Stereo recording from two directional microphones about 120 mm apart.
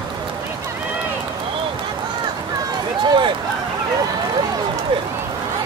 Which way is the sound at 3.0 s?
40° right (ahead or behind).